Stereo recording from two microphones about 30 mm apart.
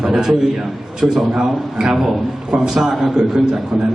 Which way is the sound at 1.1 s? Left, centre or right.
Right.